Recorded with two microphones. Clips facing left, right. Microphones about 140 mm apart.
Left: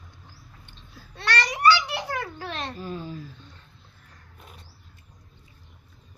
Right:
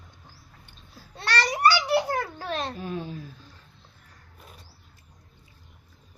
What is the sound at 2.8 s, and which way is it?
Speech, 60° right (ahead or behind).